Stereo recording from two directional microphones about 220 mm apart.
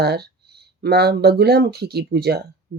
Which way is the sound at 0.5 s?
45° right (ahead or behind).